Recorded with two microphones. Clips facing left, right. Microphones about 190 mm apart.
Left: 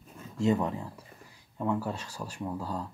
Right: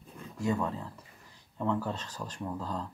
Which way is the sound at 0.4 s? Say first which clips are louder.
Left 4 dB; 20° left (ahead or behind).